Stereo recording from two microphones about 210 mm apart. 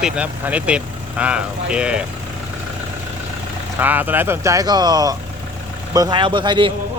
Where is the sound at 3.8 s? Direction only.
10° right (ahead or behind).